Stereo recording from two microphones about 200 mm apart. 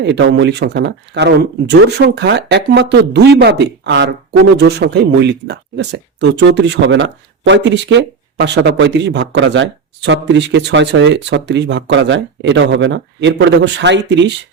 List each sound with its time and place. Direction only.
0.0 s speech: 60° right (ahead or behind)